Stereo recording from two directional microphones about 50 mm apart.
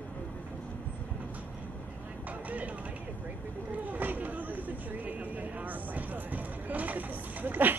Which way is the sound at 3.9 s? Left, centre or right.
Right.